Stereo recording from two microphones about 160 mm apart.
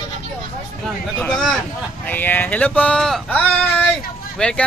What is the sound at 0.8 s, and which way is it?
Speech, 5° left (ahead or behind).